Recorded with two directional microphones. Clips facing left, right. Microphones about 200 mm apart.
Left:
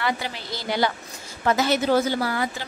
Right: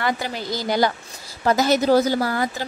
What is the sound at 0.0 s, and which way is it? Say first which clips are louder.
A woman's voice: right 3 dB; 45° right (ahead or behind).